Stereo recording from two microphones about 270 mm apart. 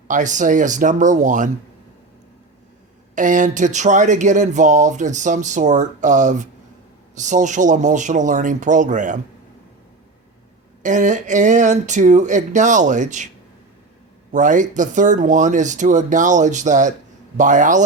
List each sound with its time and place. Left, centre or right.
0.1 s speech: right
3.2 s speech: right
10.8 s speech: right
14.3 s speech: right